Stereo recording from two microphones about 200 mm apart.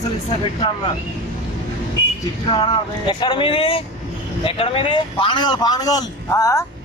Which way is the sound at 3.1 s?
25° left (ahead or behind).